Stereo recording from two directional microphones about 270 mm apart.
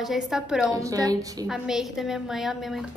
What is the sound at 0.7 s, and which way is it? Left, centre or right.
Speech, centre.